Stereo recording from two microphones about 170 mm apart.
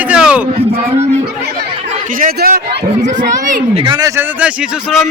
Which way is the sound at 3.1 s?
45° right (ahead or behind).